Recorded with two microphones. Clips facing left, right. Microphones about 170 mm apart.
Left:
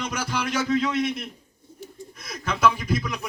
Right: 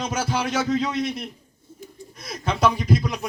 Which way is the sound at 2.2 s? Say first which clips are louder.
Right 1 dB; 30° right (ahead or behind).